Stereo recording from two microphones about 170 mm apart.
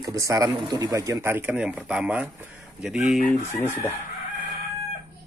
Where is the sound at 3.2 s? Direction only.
15° left (ahead or behind).